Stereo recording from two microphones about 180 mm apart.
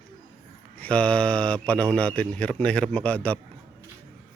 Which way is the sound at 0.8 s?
5° left (ahead or behind).